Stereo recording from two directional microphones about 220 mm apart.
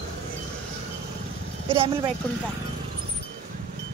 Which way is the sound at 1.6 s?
25° right (ahead or behind).